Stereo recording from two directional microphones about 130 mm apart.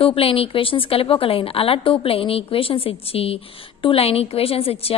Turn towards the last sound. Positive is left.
turn(degrees=50)  # may be behind; listen again after turning